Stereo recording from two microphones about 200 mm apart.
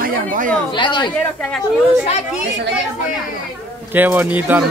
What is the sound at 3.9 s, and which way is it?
Speech, 10° right (ahead or behind).